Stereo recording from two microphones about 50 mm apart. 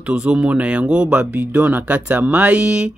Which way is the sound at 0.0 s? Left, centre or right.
Right.